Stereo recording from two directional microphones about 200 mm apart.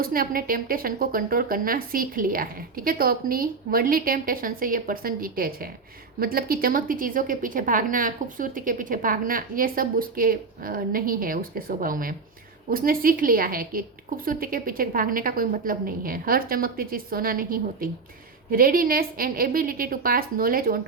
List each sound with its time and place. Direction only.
0.0 s a woman's voice: 45° right (ahead or behind)